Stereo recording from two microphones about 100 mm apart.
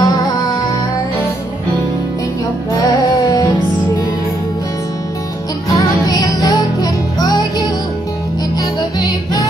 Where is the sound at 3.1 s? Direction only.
40° left (ahead or behind).